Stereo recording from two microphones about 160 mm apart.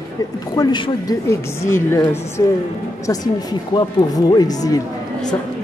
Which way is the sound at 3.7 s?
25° left (ahead or behind).